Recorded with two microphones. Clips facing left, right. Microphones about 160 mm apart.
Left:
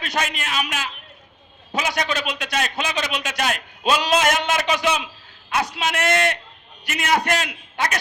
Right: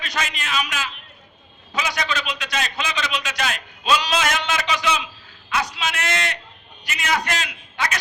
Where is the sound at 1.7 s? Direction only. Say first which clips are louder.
Left 2 dB; 50° left (ahead or behind).